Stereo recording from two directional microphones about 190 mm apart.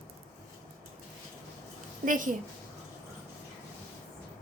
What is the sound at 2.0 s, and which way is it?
Speech, 45° right (ahead or behind).